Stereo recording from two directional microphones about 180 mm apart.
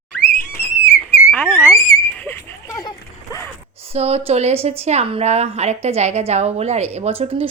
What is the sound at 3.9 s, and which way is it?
A woman's voice, 35° right (ahead or behind).